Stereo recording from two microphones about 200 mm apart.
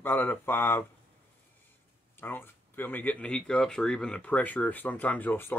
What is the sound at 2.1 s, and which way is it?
Speech, 10° left (ahead or behind).